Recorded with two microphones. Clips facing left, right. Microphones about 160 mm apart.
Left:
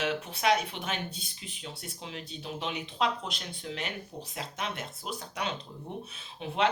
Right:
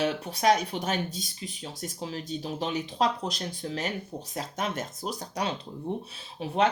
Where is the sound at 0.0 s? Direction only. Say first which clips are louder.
Right 4 dB; 40° right (ahead or behind).